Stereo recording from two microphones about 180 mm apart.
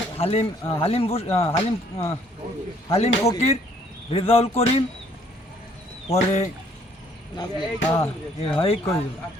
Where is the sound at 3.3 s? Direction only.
35° left (ahead or behind).